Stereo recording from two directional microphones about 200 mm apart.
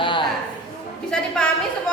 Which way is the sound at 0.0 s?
25° left (ahead or behind).